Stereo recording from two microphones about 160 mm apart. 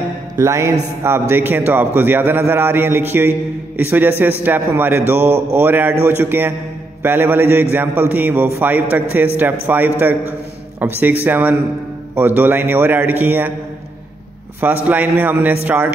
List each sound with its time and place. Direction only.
0.4 s a man's voice: 20° right (ahead or behind)
14.9 s a man's voice: 10° right (ahead or behind)